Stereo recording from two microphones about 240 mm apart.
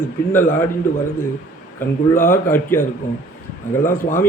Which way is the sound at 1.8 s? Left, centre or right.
Left.